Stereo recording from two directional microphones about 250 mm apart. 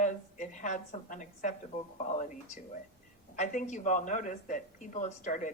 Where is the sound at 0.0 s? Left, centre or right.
Left.